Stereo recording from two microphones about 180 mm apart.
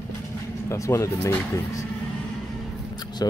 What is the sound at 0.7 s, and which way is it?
Speech, 15° left (ahead or behind).